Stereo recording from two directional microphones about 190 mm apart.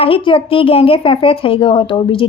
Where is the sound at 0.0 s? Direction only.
30° left (ahead or behind).